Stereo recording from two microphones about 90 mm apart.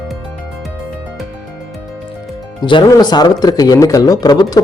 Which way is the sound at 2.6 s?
60° left (ahead or behind).